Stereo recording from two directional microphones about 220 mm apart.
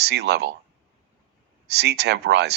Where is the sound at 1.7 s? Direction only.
50° right (ahead or behind).